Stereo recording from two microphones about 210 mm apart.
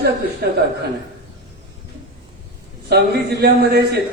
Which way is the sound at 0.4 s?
50° right (ahead or behind).